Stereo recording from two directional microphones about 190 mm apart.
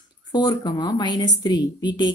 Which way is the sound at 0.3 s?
25° left (ahead or behind).